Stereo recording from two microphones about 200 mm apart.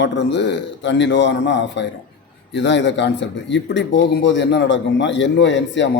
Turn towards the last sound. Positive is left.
turn(degrees=60)  # may be behind; listen again after turning